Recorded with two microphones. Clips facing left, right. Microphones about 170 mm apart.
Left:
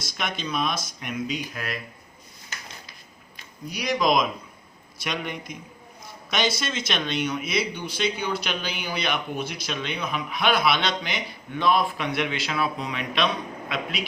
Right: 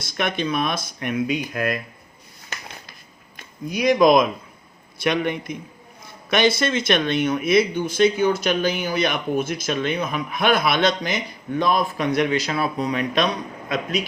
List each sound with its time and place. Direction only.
0.0 s speech: 55° right (ahead or behind)
2.5 s a sound: 60° right (ahead or behind)
3.3 s speech: 50° right (ahead or behind)